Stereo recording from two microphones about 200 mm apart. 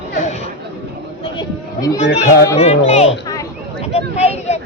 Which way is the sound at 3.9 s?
30° left (ahead or behind).